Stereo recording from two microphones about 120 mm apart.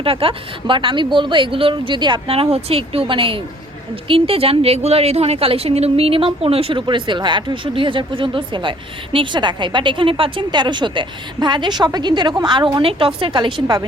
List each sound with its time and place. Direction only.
0.0 s a woman's voice: 50° right (ahead or behind)